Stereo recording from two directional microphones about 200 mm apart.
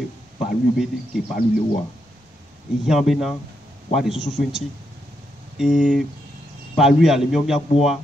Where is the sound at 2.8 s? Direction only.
Centre (ahead or behind).